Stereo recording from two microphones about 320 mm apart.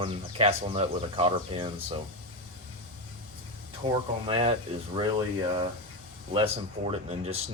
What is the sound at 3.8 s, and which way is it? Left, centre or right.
Speech, centre.